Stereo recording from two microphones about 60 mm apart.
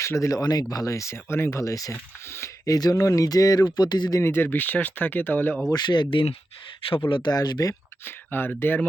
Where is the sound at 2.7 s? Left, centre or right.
Left.